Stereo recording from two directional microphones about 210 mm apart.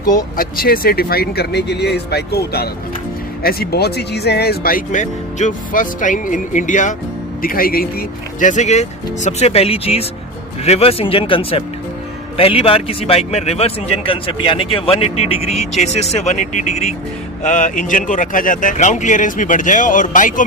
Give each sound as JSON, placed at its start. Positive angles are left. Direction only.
{"t": 0.0, "sound": "speech", "side_deg": 45}